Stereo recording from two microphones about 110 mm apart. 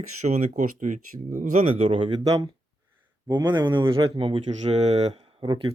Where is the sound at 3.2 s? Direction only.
40° right (ahead or behind); by 5.1 s 75° right (ahead or behind).